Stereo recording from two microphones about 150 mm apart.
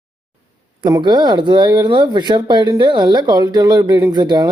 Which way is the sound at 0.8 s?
25° right (ahead or behind).